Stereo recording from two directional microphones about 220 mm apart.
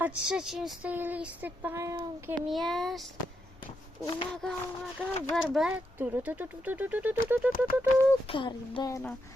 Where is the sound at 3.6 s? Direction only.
20° left (ahead or behind).